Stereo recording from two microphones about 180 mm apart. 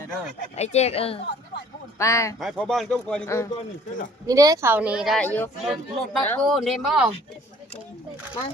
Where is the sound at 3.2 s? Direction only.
15° left (ahead or behind).